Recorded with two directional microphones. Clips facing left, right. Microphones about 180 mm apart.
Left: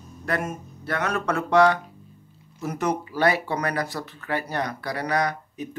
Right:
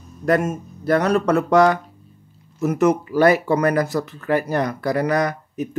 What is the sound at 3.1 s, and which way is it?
Speech, 45° right (ahead or behind).